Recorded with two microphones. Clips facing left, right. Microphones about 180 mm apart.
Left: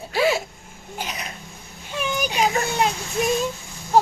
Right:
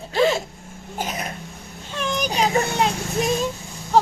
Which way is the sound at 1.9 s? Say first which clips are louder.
Even; 10° left (ahead or behind).